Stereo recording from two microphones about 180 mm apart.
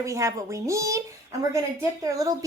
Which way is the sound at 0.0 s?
15° right (ahead or behind).